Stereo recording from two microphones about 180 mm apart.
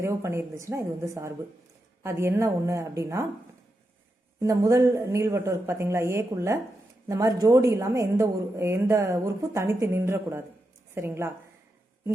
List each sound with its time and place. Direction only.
0.0 s a woman's voice: 15° right (ahead or behind)
4.4 s a woman's voice: 20° right (ahead or behind)